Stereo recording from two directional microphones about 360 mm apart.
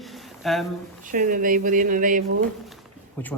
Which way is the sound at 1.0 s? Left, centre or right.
Right.